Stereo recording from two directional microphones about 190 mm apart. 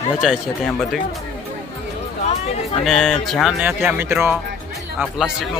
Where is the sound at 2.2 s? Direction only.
35° left (ahead or behind).